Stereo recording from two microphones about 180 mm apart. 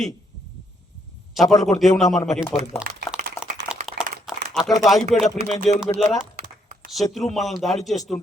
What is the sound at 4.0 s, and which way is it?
Clapping, 65° right (ahead or behind).